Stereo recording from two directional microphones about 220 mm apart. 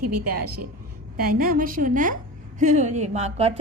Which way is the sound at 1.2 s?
40° right (ahead or behind).